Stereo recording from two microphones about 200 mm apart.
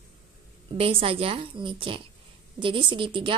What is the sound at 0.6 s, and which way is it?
A woman's voice, 25° right (ahead or behind).